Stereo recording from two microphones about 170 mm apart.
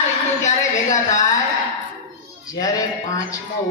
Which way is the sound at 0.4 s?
45° left (ahead or behind).